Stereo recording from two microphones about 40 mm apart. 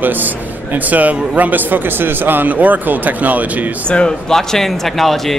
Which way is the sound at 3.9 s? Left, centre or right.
Left.